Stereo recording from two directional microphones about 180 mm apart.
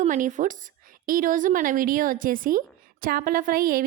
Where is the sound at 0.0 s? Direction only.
45° right (ahead or behind).